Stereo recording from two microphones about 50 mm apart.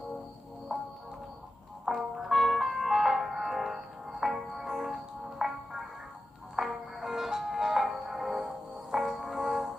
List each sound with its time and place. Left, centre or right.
0.7 s music: centre
6.6 s music: centre